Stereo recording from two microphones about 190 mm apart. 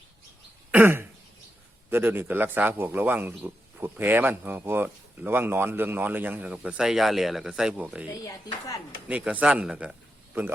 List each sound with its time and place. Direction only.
0.7 s throat clearing: 10° right (ahead or behind)
1.9 s a man's voice: 10° right (ahead or behind)
8.2 s speech: 20° left (ahead or behind)
9.0 s a man's voice: 5° right (ahead or behind)